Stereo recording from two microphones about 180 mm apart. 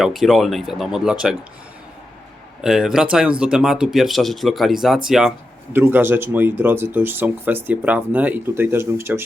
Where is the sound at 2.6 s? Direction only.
5° right (ahead or behind).